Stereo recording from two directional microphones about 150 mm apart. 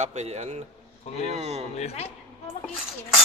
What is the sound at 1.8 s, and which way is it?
Speech, 45° left (ahead or behind).